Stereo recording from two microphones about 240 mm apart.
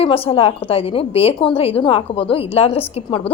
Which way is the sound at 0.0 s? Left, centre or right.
Left.